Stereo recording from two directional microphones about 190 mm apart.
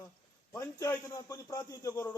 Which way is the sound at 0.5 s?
15° left (ahead or behind).